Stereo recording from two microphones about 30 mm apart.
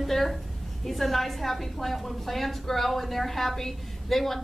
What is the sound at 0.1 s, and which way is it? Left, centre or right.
A woman's voice, centre.